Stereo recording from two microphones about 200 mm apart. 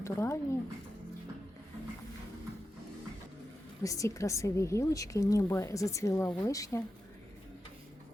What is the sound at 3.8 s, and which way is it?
A woman's voice, 15° left (ahead or behind).